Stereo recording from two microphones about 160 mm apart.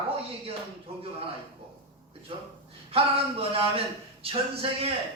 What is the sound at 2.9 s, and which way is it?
Speech, 35° right (ahead or behind).